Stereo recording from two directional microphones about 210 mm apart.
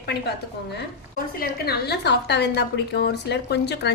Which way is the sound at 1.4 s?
50° left (ahead or behind).